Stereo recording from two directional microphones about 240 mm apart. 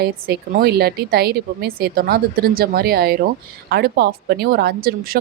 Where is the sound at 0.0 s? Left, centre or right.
Right.